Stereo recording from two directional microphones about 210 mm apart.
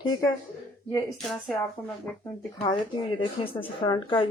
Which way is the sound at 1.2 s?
Centre (ahead or behind).